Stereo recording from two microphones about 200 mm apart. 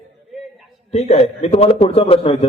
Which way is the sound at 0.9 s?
30° left (ahead or behind).